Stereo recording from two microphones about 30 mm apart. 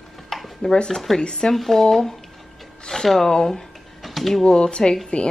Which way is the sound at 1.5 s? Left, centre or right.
Centre.